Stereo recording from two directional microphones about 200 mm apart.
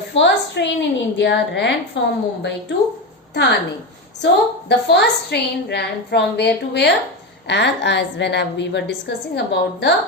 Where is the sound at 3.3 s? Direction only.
60° left (ahead or behind).